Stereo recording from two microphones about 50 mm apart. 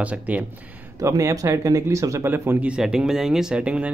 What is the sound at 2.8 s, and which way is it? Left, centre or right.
Speech, centre.